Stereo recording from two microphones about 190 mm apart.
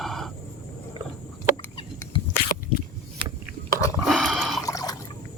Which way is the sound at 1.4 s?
25° left (ahead or behind).